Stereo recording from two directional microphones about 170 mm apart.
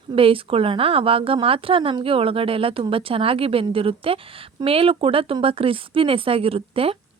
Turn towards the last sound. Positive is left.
turn(degrees=-35)  # may be behind; listen again after turning